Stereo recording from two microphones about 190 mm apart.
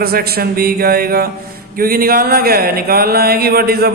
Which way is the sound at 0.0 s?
55° right (ahead or behind).